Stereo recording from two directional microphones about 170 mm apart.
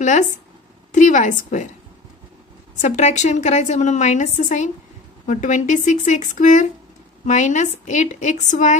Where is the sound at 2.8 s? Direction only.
45° left (ahead or behind).